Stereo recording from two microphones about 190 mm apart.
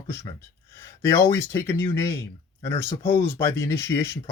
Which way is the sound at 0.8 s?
10° left (ahead or behind).